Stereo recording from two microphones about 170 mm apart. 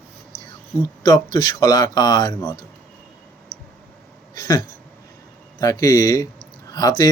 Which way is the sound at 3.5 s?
55° left (ahead or behind).